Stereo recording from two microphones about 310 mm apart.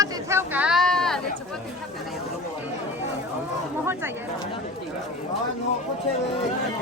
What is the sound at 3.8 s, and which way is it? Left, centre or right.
Speech, centre.